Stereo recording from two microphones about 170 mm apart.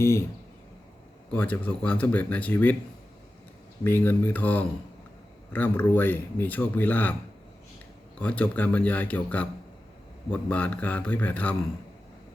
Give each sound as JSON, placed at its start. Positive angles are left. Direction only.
{"t": 0.0, "sound": "speech", "side_deg": 15}
{"t": 1.3, "sound": "speech", "side_deg": 10}
{"t": 3.8, "sound": "speech", "side_deg": 10}
{"t": 8.2, "sound": "speech", "side_deg": 10}